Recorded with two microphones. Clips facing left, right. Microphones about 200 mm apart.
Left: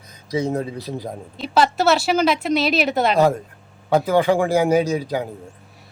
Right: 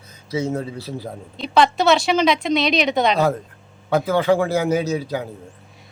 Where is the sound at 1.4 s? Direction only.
5° left (ahead or behind).